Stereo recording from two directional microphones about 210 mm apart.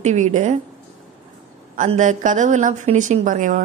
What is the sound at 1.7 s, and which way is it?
Speech, 35° right (ahead or behind).